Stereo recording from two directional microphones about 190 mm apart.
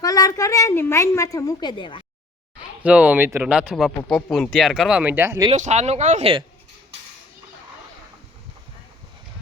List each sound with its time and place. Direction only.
0.0 s a woman's voice: 20° left (ahead or behind)
2.8 s speech: 5° right (ahead or behind)
5.5 s speech: 40° right (ahead or behind)